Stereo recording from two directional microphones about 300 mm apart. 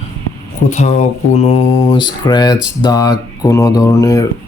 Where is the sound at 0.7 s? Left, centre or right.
Left.